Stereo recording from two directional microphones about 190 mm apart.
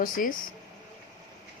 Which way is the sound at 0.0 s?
45° left (ahead or behind).